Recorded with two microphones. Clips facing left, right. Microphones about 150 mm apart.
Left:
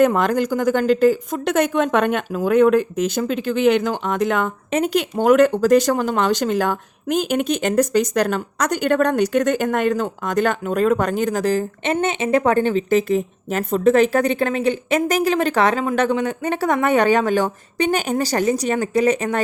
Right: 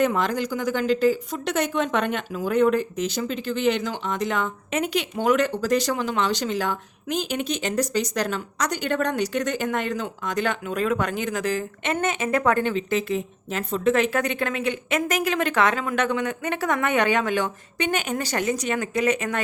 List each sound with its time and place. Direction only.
0.0 s speech: 50° left (ahead or behind)
4.7 s speech: 40° left (ahead or behind)